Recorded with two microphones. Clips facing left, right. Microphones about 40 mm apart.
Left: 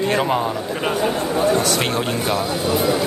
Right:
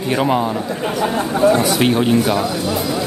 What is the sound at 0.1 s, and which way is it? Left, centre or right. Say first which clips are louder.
Speech: right 7 dB; centre.